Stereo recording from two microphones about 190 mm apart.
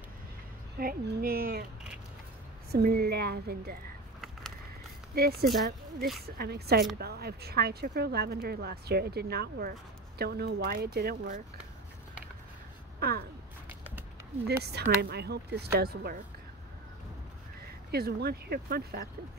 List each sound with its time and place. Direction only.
0.7 s speech: 50° right (ahead or behind)
2.7 s speech: 55° right (ahead or behind)
5.1 s speech: 55° right (ahead or behind)
13.0 s speech: 55° right (ahead or behind)
14.4 s speech: 60° right (ahead or behind)
17.9 s speech: 55° right (ahead or behind)